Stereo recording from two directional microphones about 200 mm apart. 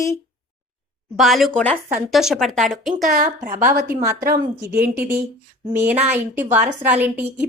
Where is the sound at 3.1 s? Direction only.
35° right (ahead or behind).